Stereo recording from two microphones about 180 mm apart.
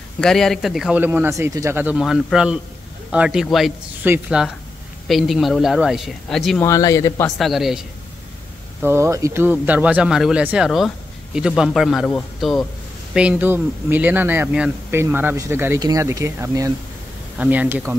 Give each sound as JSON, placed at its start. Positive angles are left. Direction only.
{"t": 0.2, "sound": "speech", "side_deg": 0}
{"t": 6.6, "sound": "speech", "side_deg": 15}
{"t": 7.3, "sound": "speech", "side_deg": 0}
{"t": 8.8, "sound": "speech", "side_deg": -15}